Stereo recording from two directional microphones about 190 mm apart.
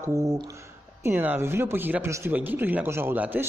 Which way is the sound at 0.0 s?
15° right (ahead or behind).